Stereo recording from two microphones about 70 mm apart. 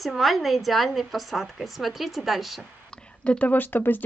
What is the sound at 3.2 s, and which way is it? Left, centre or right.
Speech, left.